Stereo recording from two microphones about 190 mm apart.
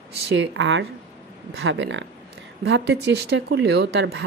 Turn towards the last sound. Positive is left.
turn(degrees=-65)  # may be behind; listen again after turning